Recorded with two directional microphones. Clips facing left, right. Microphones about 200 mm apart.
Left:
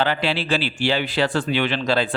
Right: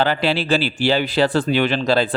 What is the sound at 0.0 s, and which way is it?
A man's voice, 40° right (ahead or behind).